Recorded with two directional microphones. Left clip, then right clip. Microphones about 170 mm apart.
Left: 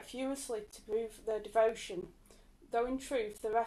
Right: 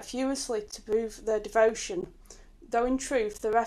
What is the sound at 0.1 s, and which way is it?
A woman's voice, 30° right (ahead or behind).